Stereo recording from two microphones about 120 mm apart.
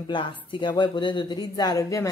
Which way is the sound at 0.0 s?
40° left (ahead or behind).